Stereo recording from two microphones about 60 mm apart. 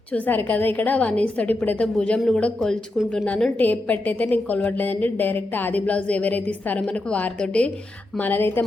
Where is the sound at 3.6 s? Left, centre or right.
Left.